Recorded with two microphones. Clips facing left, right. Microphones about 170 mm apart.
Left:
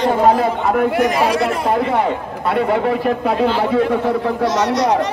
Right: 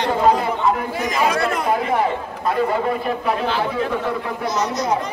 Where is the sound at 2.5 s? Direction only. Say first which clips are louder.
Left 3 dB; 70° left (ahead or behind).